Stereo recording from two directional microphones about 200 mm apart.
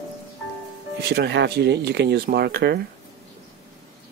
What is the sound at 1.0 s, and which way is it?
Speech, 55° right (ahead or behind).